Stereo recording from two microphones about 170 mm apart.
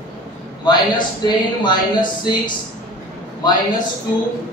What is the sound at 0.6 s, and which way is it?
Speech, 25° left (ahead or behind).